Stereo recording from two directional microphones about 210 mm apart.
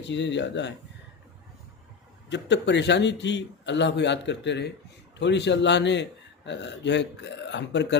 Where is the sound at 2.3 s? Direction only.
55° left (ahead or behind).